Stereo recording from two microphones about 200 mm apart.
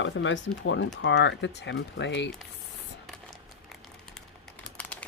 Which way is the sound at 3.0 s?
Centre (ahead or behind).